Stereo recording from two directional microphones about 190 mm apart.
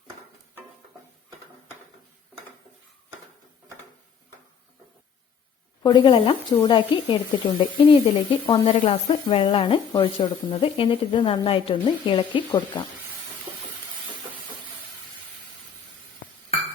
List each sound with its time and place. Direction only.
5.8 s speech: 25° left (ahead or behind)